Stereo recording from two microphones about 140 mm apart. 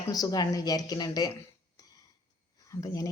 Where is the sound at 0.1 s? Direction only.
25° left (ahead or behind).